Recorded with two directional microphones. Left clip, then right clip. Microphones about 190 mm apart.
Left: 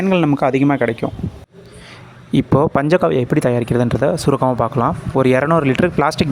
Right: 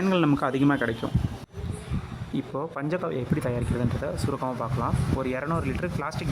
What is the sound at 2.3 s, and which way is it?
Speech, 45° left (ahead or behind).